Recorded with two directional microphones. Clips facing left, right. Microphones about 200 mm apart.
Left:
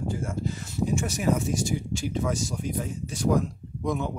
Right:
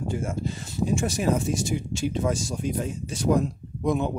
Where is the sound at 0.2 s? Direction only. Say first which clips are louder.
Right 1 dB; 25° right (ahead or behind).